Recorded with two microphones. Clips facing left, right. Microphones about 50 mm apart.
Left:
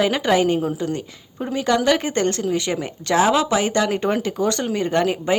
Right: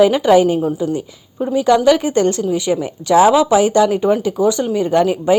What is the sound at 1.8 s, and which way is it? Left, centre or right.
Speech, left.